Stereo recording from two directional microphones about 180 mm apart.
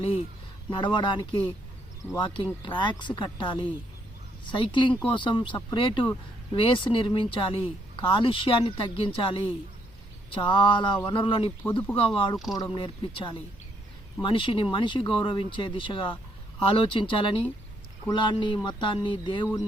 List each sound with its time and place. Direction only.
0.7 s speech: 25° left (ahead or behind)